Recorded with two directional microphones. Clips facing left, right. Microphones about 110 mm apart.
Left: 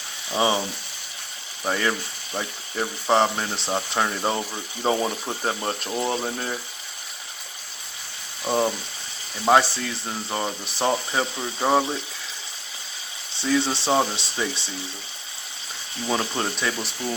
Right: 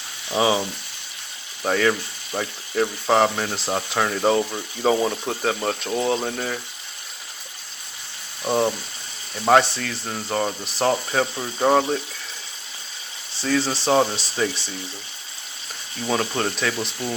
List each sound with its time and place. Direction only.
0.3 s speech: 5° right (ahead or behind)
1.6 s speech: 5° left (ahead or behind)
8.4 s speech: centre (ahead or behind)
13.3 s speech: centre (ahead or behind)
16.0 s speech: 5° left (ahead or behind)